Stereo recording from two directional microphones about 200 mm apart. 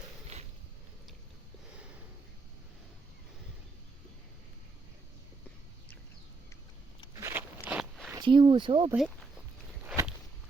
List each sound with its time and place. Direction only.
7.2 s crunch: 15° right (ahead or behind)
7.7 s walk: centre (ahead or behind)
8.1 s speech: 20° right (ahead or behind)
9.8 s a sound: 10° right (ahead or behind)